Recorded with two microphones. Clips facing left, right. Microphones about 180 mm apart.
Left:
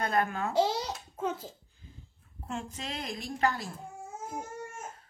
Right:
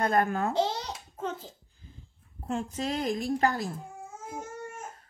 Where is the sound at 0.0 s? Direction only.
45° right (ahead or behind).